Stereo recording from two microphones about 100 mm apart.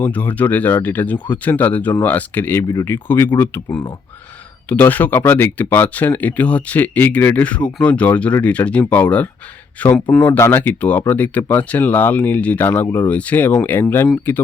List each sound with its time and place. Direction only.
0.0 s speech: 15° left (ahead or behind)
2.6 s speech: 35° left (ahead or behind)
2.9 s speech: 20° left (ahead or behind)